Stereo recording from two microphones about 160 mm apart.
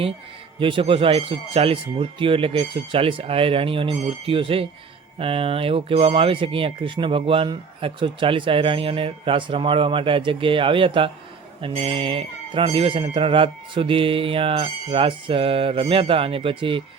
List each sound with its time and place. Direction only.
0.6 s speech: 35° right (ahead or behind)